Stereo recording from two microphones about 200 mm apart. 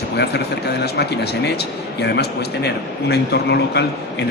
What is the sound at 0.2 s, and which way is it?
Speech, 55° left (ahead or behind).